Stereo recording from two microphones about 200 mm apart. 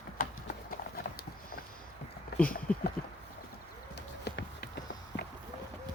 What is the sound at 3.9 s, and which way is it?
Run, 60° left (ahead or behind).